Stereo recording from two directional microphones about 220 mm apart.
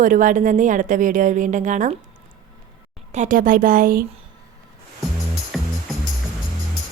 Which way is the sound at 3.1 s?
35° right (ahead or behind).